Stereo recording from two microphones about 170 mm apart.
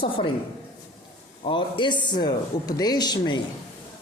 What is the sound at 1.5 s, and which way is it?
A woman's voice, 30° left (ahead or behind).